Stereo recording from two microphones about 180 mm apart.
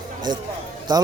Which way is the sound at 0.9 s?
20° right (ahead or behind).